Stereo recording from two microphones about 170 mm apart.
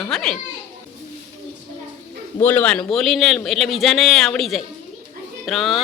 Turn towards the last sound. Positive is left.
turn(degrees=0)  # may be behind; listen again after turning